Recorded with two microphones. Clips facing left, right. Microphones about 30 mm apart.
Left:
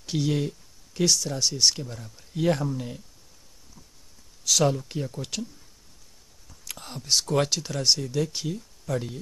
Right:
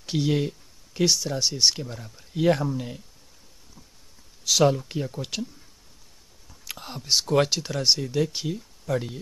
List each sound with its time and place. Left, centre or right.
0.0 s speech: centre
4.5 s speech: centre
6.5 s speech: centre